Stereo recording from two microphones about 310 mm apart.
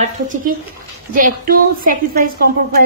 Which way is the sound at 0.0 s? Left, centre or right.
Right.